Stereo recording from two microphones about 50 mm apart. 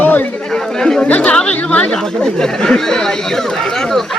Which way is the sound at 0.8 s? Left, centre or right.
Centre.